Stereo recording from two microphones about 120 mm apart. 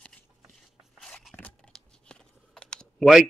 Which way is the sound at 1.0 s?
5° left (ahead or behind).